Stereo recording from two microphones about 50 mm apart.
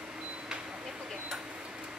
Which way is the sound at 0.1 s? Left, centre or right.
Centre.